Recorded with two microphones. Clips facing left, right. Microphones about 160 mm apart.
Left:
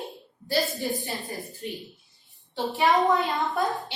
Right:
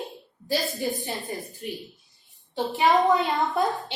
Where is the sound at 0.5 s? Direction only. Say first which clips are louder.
Even; 20° right (ahead or behind).